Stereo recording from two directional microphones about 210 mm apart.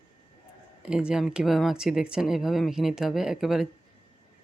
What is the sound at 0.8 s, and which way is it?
Speech, 5° right (ahead or behind).